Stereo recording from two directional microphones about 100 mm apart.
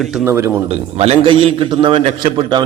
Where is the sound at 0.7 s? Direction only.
85° right.